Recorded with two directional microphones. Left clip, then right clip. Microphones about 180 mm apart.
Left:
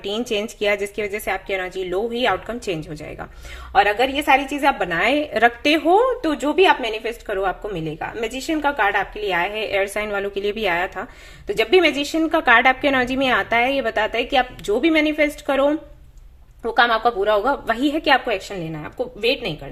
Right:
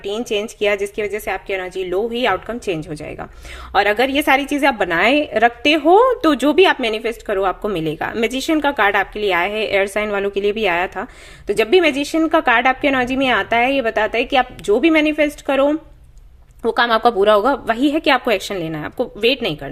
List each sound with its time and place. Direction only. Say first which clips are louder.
0.0 s speech: right 2 dB; 5° right (ahead or behind)
3.7 s a woman's voice: right 1 dB; 40° right (ahead or behind); by 6.0 s 20° right (ahead or behind)
6.0 s a woman's voice: right 5 dB; 35° right (ahead or behind)
6.4 s a woman's voice: even; 50° right (ahead or behind); by 15.8 s 20° right (ahead or behind)
16.6 s a woman's voice: right 2 dB; 30° right (ahead or behind)
18.3 s speech: right 5 dB; 45° right (ahead or behind)